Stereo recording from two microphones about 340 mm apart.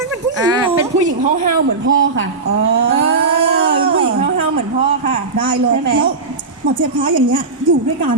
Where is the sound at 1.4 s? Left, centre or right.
Right.